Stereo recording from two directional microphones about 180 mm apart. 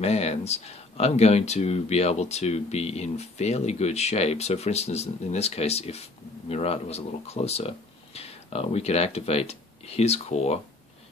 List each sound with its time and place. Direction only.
0.0 s speech: 35° left (ahead or behind)